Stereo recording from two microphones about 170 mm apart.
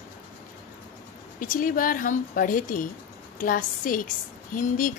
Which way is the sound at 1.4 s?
55° left (ahead or behind).